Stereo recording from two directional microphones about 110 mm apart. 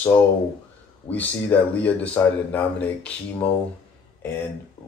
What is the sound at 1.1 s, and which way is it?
Speech, 15° left (ahead or behind).